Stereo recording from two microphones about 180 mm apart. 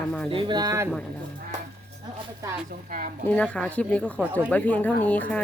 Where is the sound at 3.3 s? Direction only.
5° left (ahead or behind).